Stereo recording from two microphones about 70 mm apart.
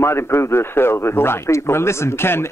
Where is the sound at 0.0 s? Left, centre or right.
Left.